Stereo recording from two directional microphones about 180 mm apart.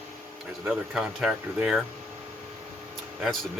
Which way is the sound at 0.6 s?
5° right (ahead or behind).